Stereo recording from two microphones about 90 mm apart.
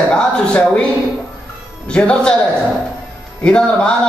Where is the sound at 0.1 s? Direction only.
10° left (ahead or behind).